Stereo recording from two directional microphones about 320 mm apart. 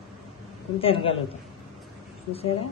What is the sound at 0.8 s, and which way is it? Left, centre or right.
Speech, centre.